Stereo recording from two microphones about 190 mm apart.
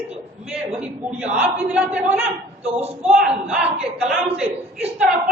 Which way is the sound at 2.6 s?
35° right (ahead or behind).